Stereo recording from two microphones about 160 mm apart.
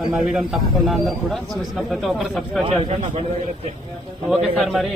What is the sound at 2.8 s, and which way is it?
Speech, 50° right (ahead or behind).